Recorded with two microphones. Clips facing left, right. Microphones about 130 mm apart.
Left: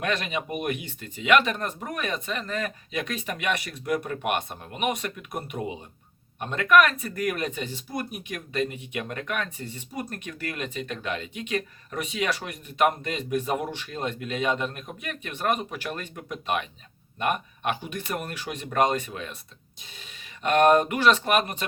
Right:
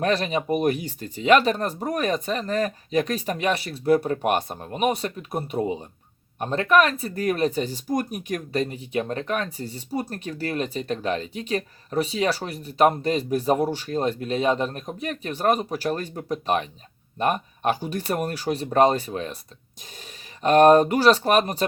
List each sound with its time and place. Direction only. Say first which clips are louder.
0.0 s speech: right 5 dB; 35° right (ahead or behind)